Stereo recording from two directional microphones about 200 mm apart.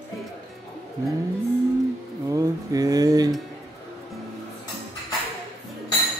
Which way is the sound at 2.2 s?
15° right (ahead or behind).